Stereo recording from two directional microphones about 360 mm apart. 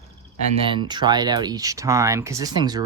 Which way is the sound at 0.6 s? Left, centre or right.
Centre.